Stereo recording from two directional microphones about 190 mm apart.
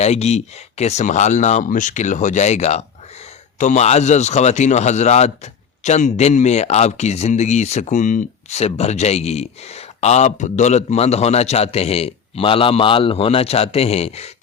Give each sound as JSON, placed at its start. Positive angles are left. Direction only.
{"t": 0.0, "sound": "speech", "side_deg": 35}